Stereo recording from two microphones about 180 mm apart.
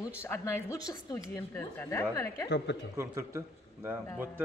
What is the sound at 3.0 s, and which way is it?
A man's voice, 15° right (ahead or behind).